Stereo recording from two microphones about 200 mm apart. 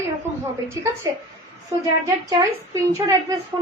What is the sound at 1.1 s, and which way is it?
A woman's voice, 15° right (ahead or behind).